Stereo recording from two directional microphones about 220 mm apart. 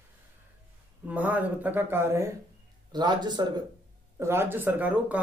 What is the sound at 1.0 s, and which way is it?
Speech, 5° right (ahead or behind).